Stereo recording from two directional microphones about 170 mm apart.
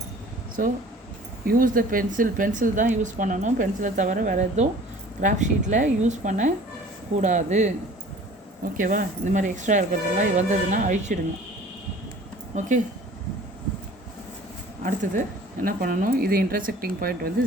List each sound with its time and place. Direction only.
0.6 s a woman's voice: 55° right (ahead or behind)
8.8 s a woman's voice: 55° right (ahead or behind)
12.5 s a woman's voice: 45° right (ahead or behind)
15.6 s speech: 60° right (ahead or behind)